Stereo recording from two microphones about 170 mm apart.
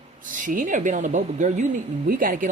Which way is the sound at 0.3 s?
50° right (ahead or behind).